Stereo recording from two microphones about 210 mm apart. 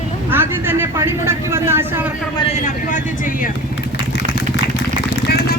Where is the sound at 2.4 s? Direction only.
35° left (ahead or behind).